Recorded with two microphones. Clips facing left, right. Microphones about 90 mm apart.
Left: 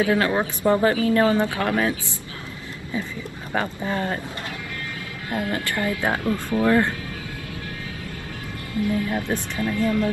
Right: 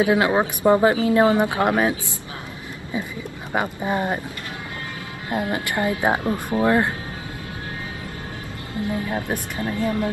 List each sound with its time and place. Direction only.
0.0 s speech: 20° right (ahead or behind)
3.5 s speech: 15° right (ahead or behind)
5.3 s speech: 20° right (ahead or behind)
8.7 s speech: 25° right (ahead or behind)